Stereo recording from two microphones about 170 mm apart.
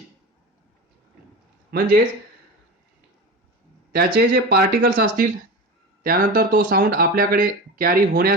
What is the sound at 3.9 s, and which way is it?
Speech, 65° right (ahead or behind).